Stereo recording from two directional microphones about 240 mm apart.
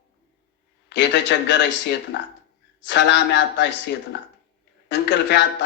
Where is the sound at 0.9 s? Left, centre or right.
Left.